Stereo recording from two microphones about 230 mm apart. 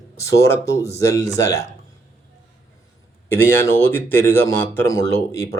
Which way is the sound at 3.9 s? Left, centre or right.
Centre.